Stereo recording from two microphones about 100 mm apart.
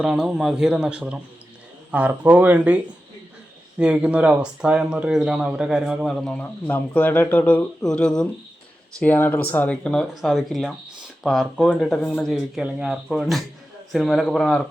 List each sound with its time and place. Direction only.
0.0 s speech: 5° right (ahead or behind)
6.1 s speech: 5° left (ahead or behind)
6.4 s speech: 15° left (ahead or behind)
7.8 s speech: 10° left (ahead or behind)
9.0 s speech: 20° left (ahead or behind)
10.2 s speech: centre (ahead or behind)